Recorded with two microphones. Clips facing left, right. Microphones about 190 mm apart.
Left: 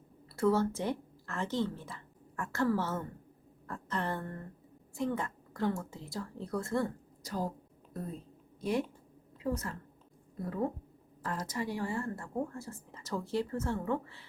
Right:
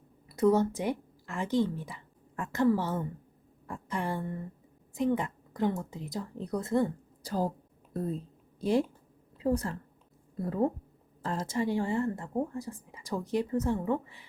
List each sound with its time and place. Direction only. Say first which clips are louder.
0.3 s a woman's voice: right 4 dB; 15° right (ahead or behind)
7.2 s a woman's voice: right 5 dB; 35° right (ahead or behind); by 14.3 s 15° right (ahead or behind)